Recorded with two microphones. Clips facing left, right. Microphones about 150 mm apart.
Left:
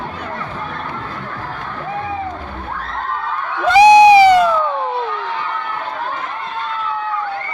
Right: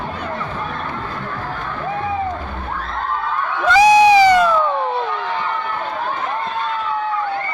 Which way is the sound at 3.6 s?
20° left (ahead or behind).